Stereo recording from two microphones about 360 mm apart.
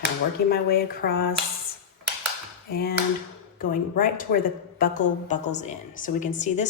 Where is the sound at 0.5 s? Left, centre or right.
Left.